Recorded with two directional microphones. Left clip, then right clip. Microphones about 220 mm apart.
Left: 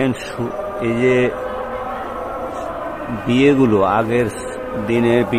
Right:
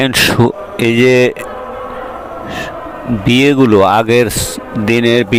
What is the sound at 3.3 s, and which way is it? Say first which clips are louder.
Speech: right 4 dB; 45° right (ahead or behind).